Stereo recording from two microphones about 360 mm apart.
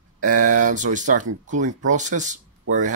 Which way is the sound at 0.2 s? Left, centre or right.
Right.